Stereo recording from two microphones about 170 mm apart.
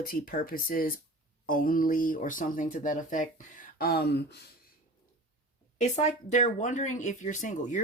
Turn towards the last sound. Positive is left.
turn(degrees=45)  # may be behind; listen again after turning